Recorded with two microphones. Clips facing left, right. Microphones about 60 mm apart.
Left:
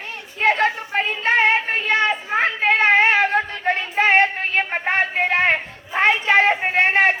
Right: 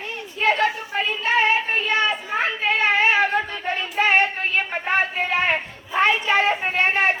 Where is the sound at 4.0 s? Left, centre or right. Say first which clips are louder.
Left 2 dB; left.